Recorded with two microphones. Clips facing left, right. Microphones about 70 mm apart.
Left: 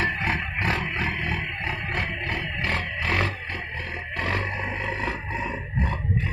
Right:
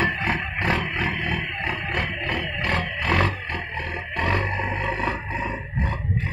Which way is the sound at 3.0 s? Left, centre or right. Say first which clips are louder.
Right 4 dB; right.